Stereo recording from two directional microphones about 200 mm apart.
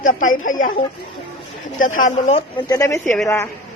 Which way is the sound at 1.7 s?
40° left (ahead or behind).